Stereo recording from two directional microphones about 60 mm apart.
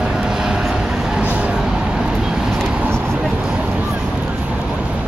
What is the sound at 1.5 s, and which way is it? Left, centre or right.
Vehicle, centre.